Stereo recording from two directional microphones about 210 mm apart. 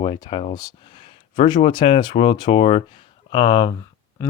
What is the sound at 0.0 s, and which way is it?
Speech, 20° left (ahead or behind).